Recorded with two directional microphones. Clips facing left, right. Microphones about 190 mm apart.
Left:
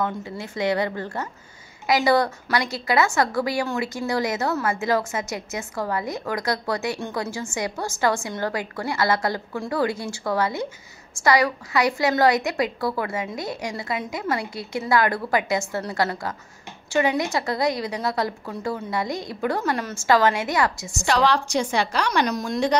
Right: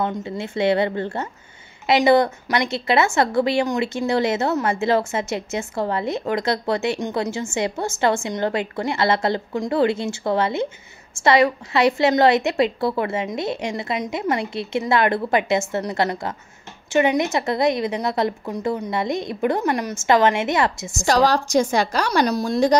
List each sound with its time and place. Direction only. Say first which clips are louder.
0.0 s a woman's voice: right 3 dB; 25° right (ahead or behind)
21.0 s a woman's voice: right 3 dB; 40° right (ahead or behind)